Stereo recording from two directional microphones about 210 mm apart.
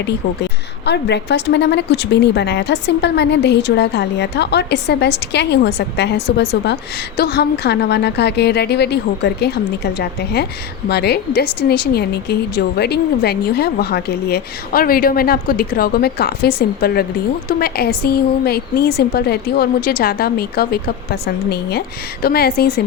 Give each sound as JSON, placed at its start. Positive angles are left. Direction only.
{"t": 0.9, "sound": "a woman's voice", "side_deg": 55}